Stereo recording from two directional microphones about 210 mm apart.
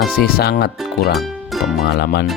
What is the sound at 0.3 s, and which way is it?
Speech, 45° left (ahead or behind).